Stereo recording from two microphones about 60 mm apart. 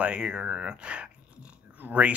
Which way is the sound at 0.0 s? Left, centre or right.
Centre.